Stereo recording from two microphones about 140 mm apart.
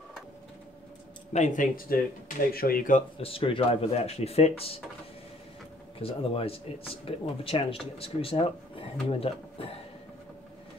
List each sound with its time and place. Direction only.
1.3 s speech: 60° left (ahead or behind); by 3.0 s 90° left
3.2 s speech: 40° left (ahead or behind)
5.9 s speech: 45° left (ahead or behind)